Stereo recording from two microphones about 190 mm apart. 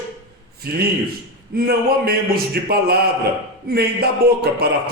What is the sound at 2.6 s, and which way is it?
A man's voice, 55° right (ahead or behind).